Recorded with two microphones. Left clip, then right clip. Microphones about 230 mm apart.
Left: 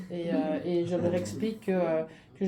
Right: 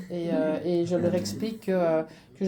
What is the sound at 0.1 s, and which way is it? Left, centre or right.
Speech, right.